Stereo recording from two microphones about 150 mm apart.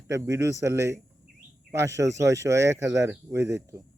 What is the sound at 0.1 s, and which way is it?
Speech, 20° right (ahead or behind).